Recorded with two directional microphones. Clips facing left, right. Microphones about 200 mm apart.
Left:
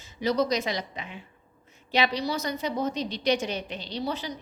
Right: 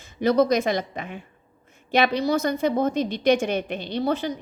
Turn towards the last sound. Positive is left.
turn(degrees=-55)  # may be behind; listen again after turning